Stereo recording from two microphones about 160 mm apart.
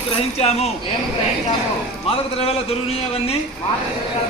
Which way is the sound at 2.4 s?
40° left (ahead or behind).